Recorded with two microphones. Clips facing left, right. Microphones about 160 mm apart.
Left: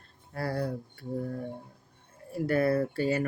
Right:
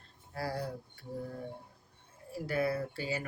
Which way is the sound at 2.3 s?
55° left (ahead or behind).